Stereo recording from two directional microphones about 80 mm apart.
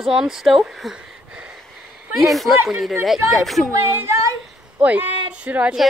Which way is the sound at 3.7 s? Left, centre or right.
Right.